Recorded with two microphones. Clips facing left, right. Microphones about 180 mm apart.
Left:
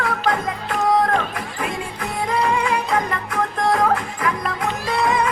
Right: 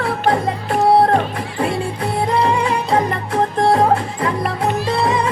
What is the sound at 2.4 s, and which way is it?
Music, 30° right (ahead or behind).